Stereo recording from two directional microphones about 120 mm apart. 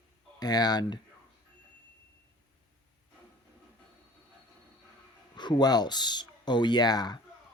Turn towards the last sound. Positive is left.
turn(degrees=35)  # may be behind; listen again after turning